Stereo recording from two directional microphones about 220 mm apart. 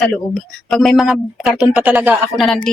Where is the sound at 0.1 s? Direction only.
Centre (ahead or behind).